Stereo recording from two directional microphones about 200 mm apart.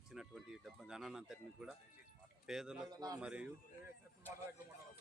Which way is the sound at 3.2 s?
5° right (ahead or behind).